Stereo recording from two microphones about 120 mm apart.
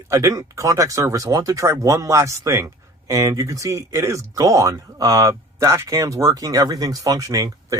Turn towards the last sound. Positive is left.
turn(degrees=-30)  # may be behind; listen again after turning